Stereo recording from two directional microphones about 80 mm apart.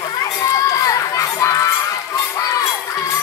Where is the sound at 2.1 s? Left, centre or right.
Left.